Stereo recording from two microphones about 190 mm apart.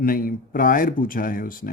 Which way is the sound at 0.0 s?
50° left (ahead or behind).